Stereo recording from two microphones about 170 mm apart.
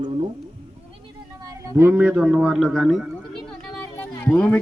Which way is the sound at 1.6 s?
15° right (ahead or behind).